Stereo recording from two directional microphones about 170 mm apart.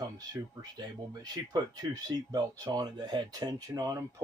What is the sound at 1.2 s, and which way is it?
Speech, 25° right (ahead or behind).